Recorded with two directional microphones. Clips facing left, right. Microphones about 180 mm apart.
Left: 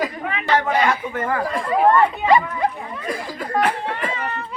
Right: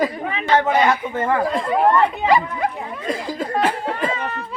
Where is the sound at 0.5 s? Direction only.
20° right (ahead or behind).